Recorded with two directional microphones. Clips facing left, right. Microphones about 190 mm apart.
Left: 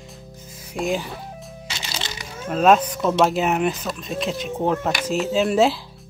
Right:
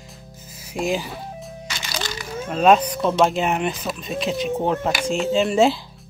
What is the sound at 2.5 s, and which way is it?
Speech, centre (ahead or behind).